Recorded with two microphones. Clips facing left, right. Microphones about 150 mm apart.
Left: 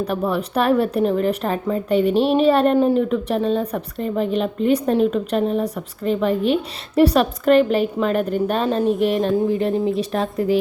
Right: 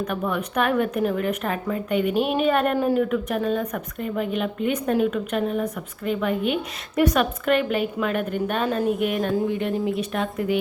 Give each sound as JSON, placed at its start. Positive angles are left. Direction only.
{"t": 0.0, "sound": "a woman's voice", "side_deg": 35}